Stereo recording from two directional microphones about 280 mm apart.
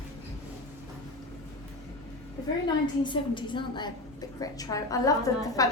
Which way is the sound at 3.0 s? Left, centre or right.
Centre.